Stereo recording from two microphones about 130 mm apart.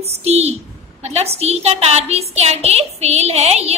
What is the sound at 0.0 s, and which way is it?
A woman's voice, 55° right (ahead or behind).